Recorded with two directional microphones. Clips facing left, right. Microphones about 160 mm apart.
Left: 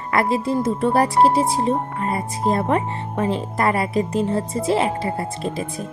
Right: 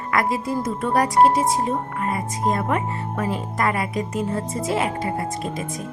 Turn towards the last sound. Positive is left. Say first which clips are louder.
# left 1 dB
turn(degrees=30)  # may be behind; listen again after turning